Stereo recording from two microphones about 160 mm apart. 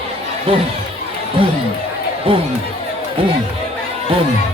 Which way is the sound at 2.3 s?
35° right (ahead or behind).